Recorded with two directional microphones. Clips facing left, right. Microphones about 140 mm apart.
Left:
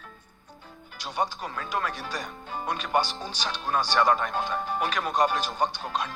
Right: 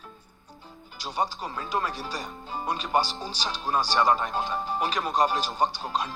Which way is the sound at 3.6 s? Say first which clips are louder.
Right 1 dB; 5° right (ahead or behind).